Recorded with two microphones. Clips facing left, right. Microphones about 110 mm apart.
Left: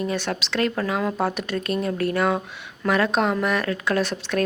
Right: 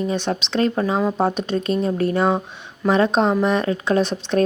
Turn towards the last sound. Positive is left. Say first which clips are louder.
# right 4 dB
turn(degrees=-20)  # may be behind; listen again after turning